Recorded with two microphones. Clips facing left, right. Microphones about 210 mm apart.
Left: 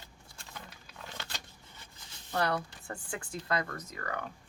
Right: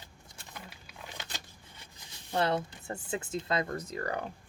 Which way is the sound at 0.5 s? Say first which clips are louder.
Right 1 dB; 15° right (ahead or behind).